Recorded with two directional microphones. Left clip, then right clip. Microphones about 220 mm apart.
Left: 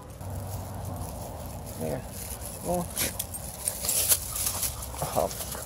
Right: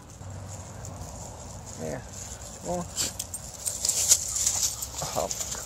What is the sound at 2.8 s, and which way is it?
Speech, 5° left (ahead or behind).